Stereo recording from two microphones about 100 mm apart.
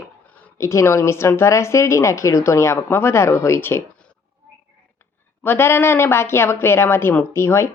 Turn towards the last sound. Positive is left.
turn(degrees=25)  # may be behind; listen again after turning